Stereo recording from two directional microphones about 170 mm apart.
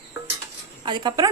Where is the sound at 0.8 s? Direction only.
25° right (ahead or behind).